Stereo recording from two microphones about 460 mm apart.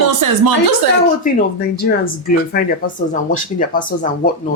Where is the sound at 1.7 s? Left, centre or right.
Centre.